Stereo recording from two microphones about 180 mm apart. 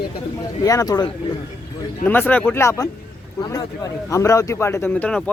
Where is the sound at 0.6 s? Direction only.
20° left (ahead or behind).